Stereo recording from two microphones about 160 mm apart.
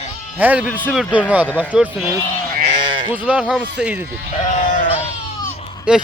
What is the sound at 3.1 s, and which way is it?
Speech, 10° right (ahead or behind).